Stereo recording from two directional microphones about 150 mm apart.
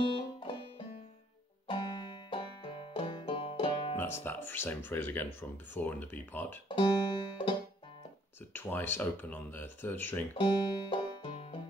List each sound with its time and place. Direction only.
0.0 s music: 35° left (ahead or behind)
1.7 s banjo: 30° left (ahead or behind)
4.0 s speech: 15° left (ahead or behind)
6.7 s music: 30° left (ahead or behind)
8.5 s speech: 15° left (ahead or behind)
10.3 s banjo: 30° left (ahead or behind)